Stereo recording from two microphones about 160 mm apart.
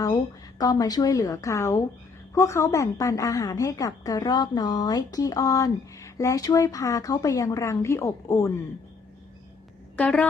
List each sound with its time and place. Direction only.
0.6 s a woman's voice: 25° left (ahead or behind)
10.0 s speech: 5° left (ahead or behind)